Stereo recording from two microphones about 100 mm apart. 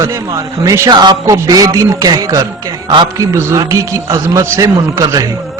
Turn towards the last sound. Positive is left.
turn(degrees=-35)  # may be behind; listen again after turning